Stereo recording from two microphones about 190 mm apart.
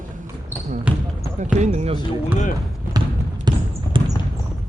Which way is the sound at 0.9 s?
5° right (ahead or behind).